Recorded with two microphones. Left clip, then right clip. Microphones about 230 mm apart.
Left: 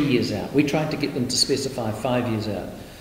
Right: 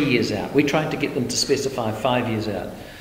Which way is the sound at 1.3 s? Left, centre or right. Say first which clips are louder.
Even; centre.